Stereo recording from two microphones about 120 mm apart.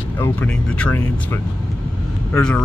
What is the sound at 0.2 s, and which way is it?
Speech, 10° left (ahead or behind).